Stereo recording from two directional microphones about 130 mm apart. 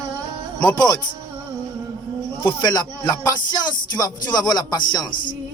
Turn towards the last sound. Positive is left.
turn(degrees=30)  # may be behind; listen again after turning